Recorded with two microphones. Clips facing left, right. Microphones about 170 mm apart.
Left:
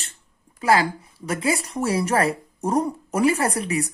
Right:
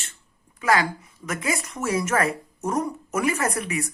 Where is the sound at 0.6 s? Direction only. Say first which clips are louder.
Left 3 dB; 30° left (ahead or behind).